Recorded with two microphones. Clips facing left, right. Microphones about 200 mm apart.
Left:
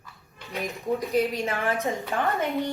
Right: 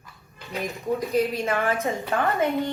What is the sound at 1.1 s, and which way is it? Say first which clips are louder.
Speech: right 1 dB; 15° left (ahead or behind).